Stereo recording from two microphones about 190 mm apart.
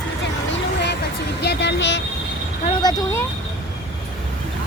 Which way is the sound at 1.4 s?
60° left (ahead or behind).